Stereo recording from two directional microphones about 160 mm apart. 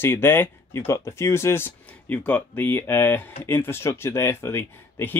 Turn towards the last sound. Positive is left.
turn(degrees=15)  # may be behind; listen again after turning